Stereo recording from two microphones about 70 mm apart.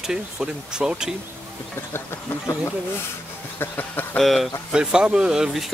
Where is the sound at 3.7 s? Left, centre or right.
Left.